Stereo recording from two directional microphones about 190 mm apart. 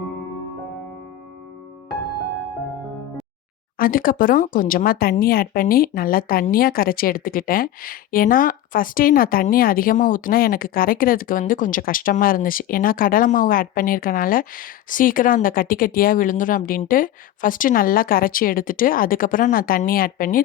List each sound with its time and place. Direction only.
3.8 s speech: 50° left (ahead or behind)